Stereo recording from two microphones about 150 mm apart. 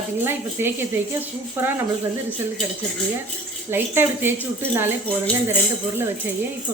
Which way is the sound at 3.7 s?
15° right (ahead or behind).